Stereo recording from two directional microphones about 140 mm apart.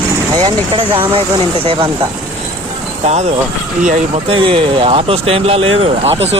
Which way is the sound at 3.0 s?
50° right (ahead or behind).